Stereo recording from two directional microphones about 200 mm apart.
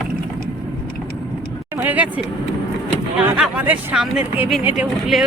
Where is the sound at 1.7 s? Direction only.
10° right (ahead or behind).